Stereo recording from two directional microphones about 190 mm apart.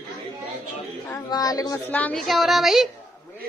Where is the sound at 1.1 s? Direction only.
20° left (ahead or behind).